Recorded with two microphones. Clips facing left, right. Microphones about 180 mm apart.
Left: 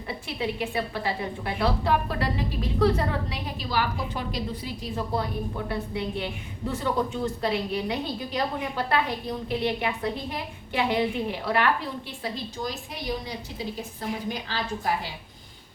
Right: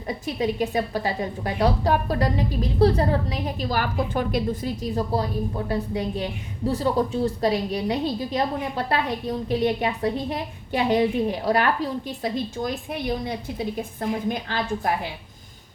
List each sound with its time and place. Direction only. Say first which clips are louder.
0.1 s a woman's voice: right 5 dB; 40° right (ahead or behind)